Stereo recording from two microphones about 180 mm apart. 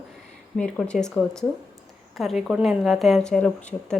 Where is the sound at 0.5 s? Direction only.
5° left (ahead or behind).